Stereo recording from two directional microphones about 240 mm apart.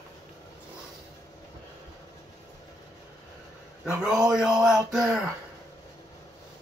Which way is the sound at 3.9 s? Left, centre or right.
Centre.